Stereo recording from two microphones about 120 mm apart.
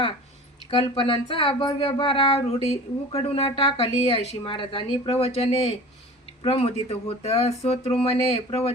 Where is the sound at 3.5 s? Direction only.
50° left (ahead or behind).